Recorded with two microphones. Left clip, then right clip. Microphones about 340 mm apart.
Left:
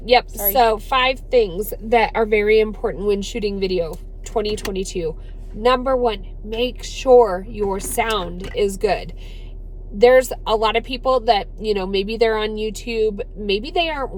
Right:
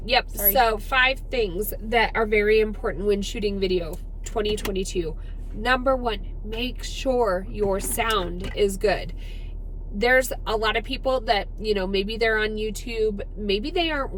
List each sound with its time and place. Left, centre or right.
0.5 s a woman's voice: centre